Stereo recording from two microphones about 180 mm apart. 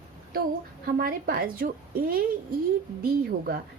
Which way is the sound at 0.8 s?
60° right (ahead or behind).